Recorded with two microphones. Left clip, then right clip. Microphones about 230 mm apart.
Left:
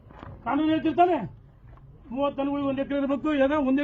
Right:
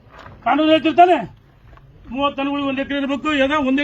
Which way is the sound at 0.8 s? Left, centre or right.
Right.